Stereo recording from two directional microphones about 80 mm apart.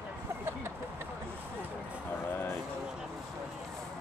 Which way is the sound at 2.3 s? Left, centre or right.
Left.